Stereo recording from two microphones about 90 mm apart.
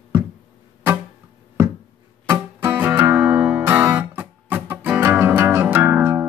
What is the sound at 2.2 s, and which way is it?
Music, 25° right (ahead or behind).